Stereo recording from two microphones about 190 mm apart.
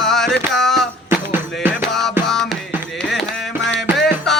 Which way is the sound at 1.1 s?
10° right (ahead or behind).